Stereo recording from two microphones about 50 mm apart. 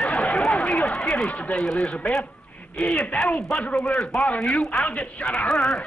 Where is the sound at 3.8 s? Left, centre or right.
Centre.